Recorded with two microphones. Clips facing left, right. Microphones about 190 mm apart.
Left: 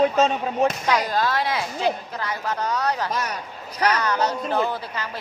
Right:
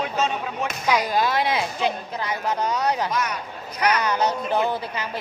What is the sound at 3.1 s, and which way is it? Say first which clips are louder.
Speech: right 1 dB; 35° left (ahead or behind).